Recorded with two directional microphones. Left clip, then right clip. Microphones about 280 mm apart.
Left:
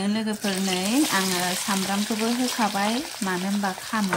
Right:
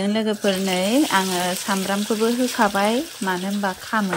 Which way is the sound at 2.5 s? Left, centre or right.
Centre.